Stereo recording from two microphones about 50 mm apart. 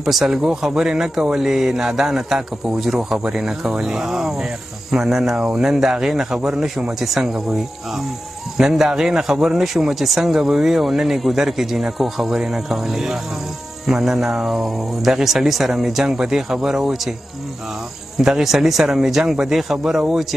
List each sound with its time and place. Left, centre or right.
0.0 s speech: centre
5.3 s speech: right
5.6 s speech: centre
18.4 s speech: centre